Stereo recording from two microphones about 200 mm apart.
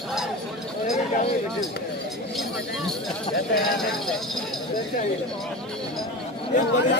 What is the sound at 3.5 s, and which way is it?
Speech, centre (ahead or behind).